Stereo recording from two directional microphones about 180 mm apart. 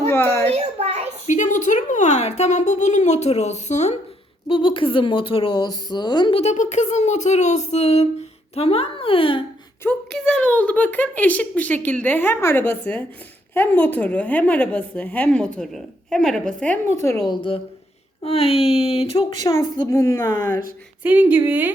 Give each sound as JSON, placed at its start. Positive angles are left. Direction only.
{"t": 0.5, "sound": "a sound", "side_deg": -35}
{"t": 1.3, "sound": "a woman's voice", "side_deg": 45}
{"t": 4.4, "sound": "a woman's voice", "side_deg": 30}
{"t": 6.4, "sound": "speech", "side_deg": 40}
{"t": 9.8, "sound": "a woman's voice", "side_deg": 5}
{"t": 17.2, "sound": "a woman's voice", "side_deg": 30}
{"t": 21.0, "sound": "speech", "side_deg": -10}